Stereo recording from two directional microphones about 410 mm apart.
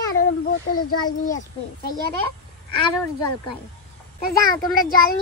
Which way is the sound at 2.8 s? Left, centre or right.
Centre.